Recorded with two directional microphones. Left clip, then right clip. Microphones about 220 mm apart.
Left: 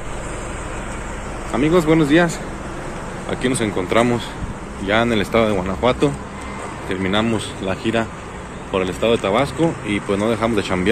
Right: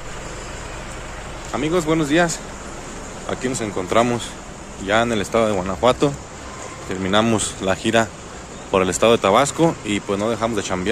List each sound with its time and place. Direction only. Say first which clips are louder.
1.5 s speech: left 4 dB; centre (ahead or behind)